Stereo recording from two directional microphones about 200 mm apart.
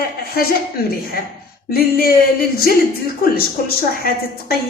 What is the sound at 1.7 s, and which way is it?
A woman's voice, 50° left (ahead or behind).